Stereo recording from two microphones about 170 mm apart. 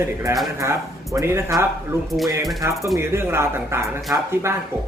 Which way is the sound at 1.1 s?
15° right (ahead or behind).